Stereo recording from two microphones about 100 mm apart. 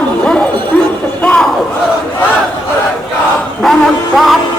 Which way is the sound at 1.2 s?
10° left (ahead or behind).